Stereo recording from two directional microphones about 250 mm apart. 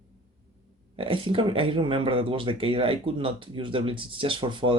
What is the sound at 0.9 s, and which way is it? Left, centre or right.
Speech, right.